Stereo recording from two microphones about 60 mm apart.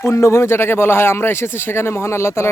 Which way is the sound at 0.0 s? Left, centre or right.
Left.